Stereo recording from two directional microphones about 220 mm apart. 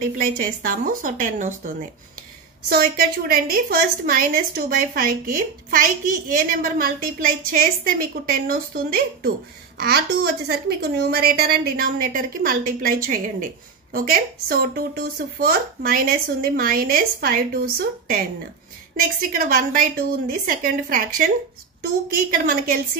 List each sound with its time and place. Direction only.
0.0 s a woman's voice: 40° right (ahead or behind)